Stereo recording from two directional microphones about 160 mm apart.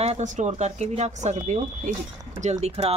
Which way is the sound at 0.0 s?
45° right (ahead or behind).